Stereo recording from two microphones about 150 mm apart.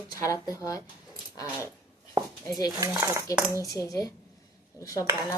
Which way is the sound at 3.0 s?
20° right (ahead or behind).